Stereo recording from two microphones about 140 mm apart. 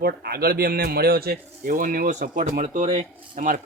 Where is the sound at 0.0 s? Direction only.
90° right.